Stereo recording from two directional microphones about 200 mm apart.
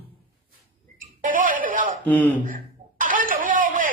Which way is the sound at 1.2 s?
40° right (ahead or behind).